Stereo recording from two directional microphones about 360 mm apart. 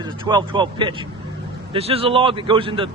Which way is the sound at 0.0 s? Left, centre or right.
Centre.